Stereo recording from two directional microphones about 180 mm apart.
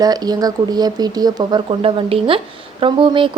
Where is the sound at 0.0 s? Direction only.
20° right (ahead or behind).